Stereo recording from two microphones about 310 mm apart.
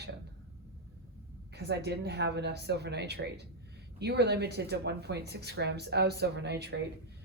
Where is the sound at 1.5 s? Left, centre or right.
Right.